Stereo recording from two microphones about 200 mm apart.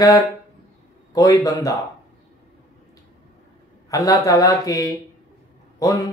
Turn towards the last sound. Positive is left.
turn(degrees=15)  # may be behind; listen again after turning